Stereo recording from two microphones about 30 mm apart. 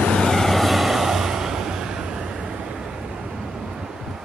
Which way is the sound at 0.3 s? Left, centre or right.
Centre.